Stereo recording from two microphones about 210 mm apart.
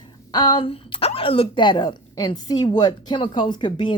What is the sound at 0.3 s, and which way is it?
A woman's voice, 20° left (ahead or behind).